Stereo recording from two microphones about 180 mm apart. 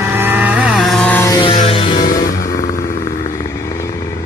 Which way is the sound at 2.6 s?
50° left (ahead or behind).